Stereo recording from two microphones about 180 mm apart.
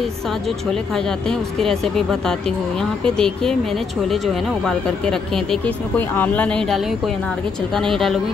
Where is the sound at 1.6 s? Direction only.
Centre (ahead or behind).